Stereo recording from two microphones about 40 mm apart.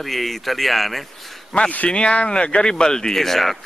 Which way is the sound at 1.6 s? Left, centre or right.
Left.